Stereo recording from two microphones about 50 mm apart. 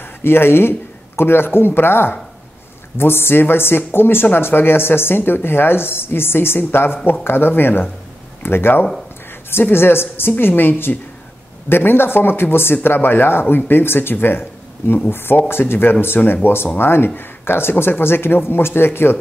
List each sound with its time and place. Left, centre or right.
0.0 s speech: left